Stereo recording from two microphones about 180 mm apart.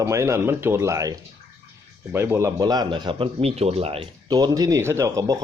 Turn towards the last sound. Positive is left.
turn(degrees=-20)  # may be behind; listen again after turning